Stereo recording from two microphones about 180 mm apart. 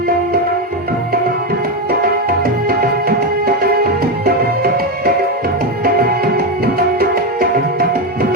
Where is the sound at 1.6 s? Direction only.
55° right (ahead or behind).